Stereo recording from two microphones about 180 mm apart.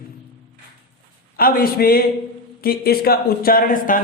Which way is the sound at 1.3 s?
55° left (ahead or behind).